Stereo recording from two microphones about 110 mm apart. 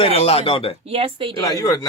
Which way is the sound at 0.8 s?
60° right (ahead or behind).